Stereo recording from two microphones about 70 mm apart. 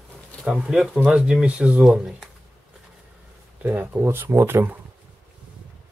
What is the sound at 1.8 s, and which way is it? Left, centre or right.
Speech, centre.